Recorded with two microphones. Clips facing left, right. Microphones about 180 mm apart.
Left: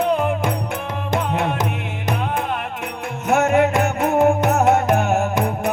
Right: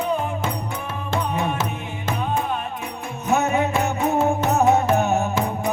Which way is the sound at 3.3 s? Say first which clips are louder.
Left 4 dB; 90° left.